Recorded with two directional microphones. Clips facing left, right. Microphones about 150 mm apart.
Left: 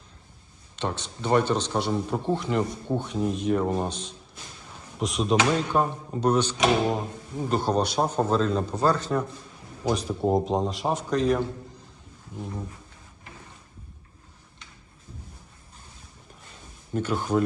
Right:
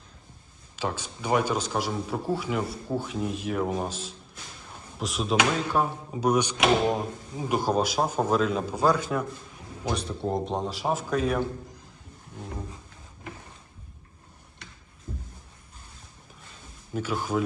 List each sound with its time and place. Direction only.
0.8 s a man's voice: 5° right (ahead or behind)
9.9 s speech: centre (ahead or behind)
15.1 s a sound: 70° right (ahead or behind)
16.9 s speech: 5° right (ahead or behind)